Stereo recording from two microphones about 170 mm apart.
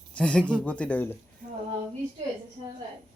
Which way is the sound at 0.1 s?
5° left (ahead or behind).